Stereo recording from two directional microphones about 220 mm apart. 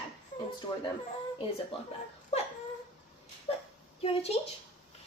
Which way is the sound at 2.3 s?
30° left (ahead or behind).